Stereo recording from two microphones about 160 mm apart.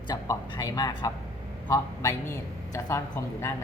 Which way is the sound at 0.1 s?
25° left (ahead or behind).